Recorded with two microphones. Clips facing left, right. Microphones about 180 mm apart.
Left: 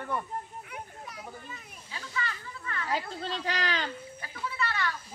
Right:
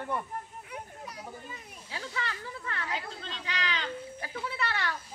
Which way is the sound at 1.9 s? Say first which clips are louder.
Even; 65° right (ahead or behind).